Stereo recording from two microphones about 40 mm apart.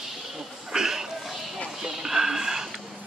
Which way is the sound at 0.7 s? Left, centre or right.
Centre.